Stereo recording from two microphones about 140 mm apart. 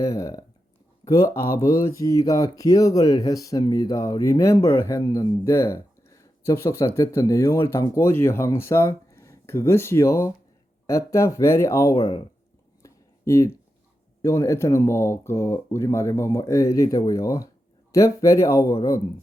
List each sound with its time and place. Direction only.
0.0 s speech: 25° left (ahead or behind)
11.9 s speech: 45° left (ahead or behind)
12.8 s a sound: 20° left (ahead or behind)
14.2 s speech: 20° left (ahead or behind)